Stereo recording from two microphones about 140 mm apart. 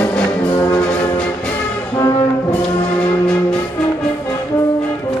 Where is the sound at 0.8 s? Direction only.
10° left (ahead or behind).